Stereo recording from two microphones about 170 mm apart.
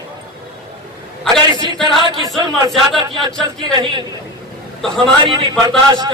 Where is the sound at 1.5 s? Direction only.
25° right (ahead or behind).